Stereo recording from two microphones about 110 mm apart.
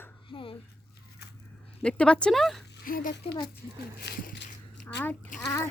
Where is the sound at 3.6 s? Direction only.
25° right (ahead or behind).